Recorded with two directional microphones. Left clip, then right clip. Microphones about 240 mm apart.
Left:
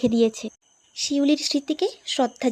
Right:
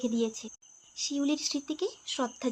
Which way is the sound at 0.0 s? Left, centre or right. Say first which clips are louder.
Left 11 dB; left.